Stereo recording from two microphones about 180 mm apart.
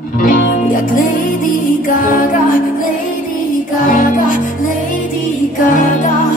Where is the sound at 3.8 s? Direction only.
50° left (ahead or behind).